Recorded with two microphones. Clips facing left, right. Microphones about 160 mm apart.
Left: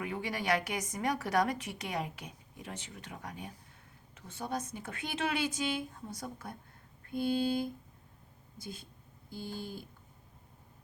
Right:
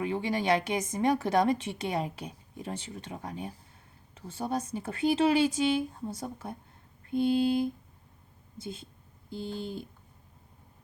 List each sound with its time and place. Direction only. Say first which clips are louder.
0.0 s a woman's voice: right 7 dB; 25° right (ahead or behind)